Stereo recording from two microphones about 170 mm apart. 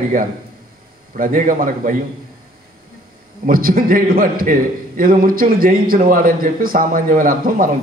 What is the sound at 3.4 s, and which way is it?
A man's voice, 55° right (ahead or behind).